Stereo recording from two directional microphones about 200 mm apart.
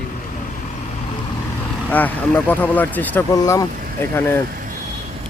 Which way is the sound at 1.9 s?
10° left (ahead or behind).